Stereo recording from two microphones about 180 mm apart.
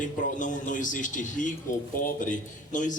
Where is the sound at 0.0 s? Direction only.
45° left (ahead or behind).